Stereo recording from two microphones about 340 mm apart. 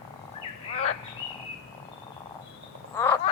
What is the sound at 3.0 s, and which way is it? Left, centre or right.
Frog, centre.